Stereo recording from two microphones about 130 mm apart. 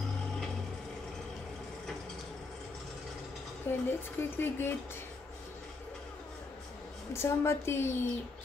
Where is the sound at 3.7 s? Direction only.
20° left (ahead or behind).